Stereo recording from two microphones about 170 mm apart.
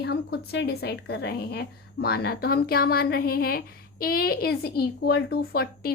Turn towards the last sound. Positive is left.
turn(degrees=65)  # may be behind; listen again after turning